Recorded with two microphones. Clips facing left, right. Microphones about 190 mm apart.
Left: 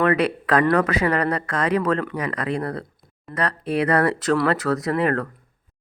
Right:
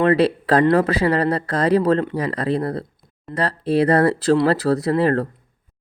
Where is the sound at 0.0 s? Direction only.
30° right (ahead or behind).